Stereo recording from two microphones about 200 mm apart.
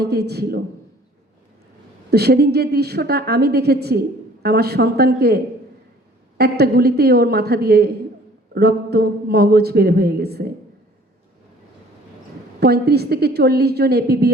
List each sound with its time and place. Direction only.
0.0 s a man's voice: 55° right (ahead or behind)
2.0 s a man's voice: 55° right (ahead or behind)
12.5 s a man's voice: 55° right (ahead or behind)